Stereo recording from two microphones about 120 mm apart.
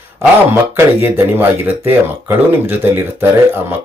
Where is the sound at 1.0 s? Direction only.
20° right (ahead or behind).